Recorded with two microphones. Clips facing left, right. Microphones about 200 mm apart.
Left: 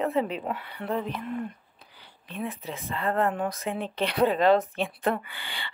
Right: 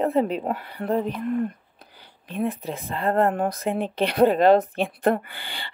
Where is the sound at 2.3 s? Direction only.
50° right (ahead or behind).